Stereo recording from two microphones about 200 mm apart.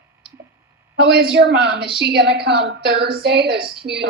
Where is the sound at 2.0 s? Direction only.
55° right (ahead or behind).